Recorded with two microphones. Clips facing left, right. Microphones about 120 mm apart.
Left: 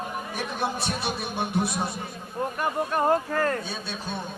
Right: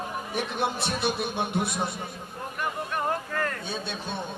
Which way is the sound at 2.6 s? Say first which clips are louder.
Left 4 dB; 35° left (ahead or behind).